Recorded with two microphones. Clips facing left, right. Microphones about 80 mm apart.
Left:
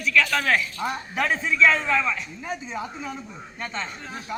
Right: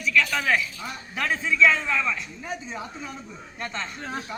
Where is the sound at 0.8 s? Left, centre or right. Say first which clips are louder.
Left 8 dB; left.